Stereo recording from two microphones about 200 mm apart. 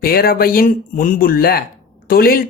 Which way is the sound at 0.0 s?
50° left (ahead or behind).